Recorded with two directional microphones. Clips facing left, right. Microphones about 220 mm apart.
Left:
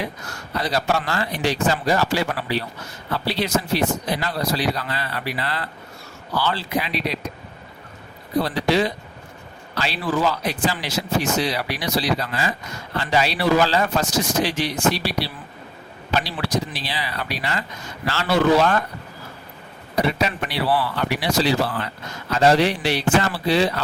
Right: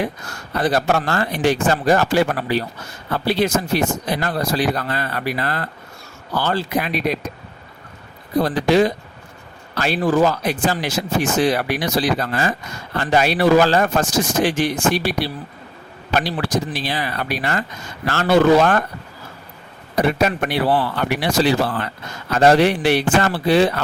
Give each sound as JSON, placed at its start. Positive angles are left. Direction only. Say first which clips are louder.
{"t": 0.5, "sound": "speech", "louder": "right 4 dB", "side_deg": -50}
{"t": 8.4, "sound": "speech", "louder": "right 4 dB", "side_deg": -45}
{"t": 20.0, "sound": "speech", "louder": "right 4 dB", "side_deg": -50}